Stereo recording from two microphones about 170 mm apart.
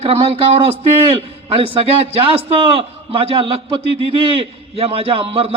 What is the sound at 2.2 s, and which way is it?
A man's voice, 35° right (ahead or behind).